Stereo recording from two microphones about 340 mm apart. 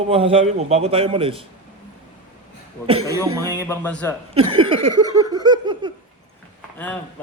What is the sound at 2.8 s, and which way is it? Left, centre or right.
A man's voice, centre.